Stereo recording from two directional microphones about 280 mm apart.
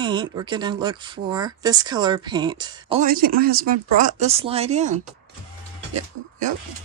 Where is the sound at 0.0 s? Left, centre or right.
Centre.